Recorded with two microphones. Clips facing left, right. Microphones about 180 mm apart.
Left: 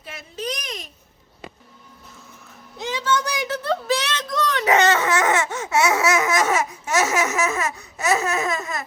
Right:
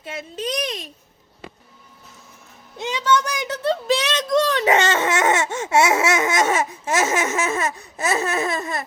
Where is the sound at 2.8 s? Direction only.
20° right (ahead or behind).